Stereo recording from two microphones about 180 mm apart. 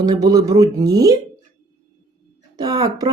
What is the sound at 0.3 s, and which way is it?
Speech, 20° right (ahead or behind).